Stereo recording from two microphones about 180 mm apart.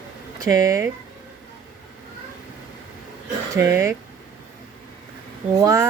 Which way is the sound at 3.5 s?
15° right (ahead or behind).